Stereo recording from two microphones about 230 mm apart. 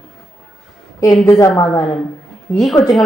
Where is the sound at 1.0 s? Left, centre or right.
Centre.